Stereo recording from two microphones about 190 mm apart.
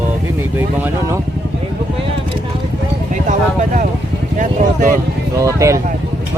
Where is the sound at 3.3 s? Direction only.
45° right (ahead or behind).